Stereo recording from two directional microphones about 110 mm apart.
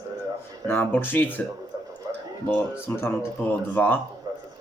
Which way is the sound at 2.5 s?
20° left (ahead or behind).